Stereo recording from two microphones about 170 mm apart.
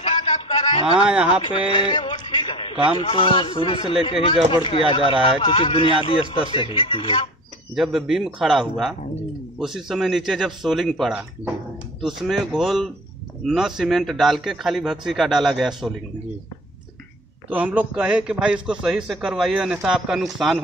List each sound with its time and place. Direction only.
0.0 s a sound: 35° left (ahead or behind)
0.8 s a man's voice: 5° right (ahead or behind)
1.7 s a sound: 30° left (ahead or behind)
3.0 s a man's voice: 30° left (ahead or behind)
7.7 s a man's voice: centre (ahead or behind)
17.5 s a man's voice: 10° right (ahead or behind)